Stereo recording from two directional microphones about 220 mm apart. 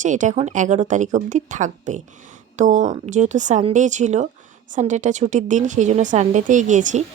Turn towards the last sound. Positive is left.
turn(degrees=-35)  # may be behind; listen again after turning